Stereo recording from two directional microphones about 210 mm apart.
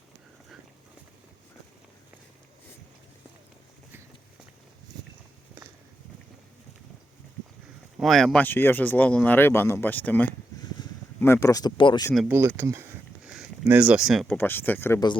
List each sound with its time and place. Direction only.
7.9 s speech: centre (ahead or behind); by 12.1 s 20° left (ahead or behind)
12.1 s speech: centre (ahead or behind)
12.5 s a sound: 15° right (ahead or behind)
14.3 s speech: 10° left (ahead or behind)